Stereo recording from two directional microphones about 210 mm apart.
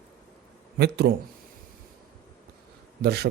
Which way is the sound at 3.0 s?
50° right (ahead or behind).